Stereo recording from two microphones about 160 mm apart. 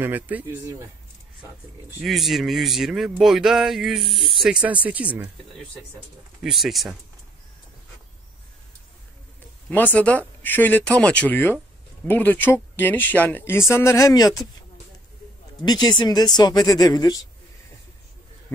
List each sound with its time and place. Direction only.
0.0 s speech: 10° right (ahead or behind)
2.0 s speech: centre (ahead or behind)
6.4 s speech: centre (ahead or behind)
9.7 s speech: 10° left (ahead or behind)
15.6 s speech: 25° left (ahead or behind)